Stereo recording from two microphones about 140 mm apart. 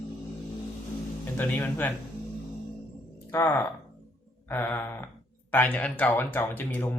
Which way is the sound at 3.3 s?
15° left (ahead or behind).